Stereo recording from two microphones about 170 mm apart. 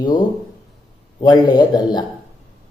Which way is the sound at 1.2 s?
25° left (ahead or behind).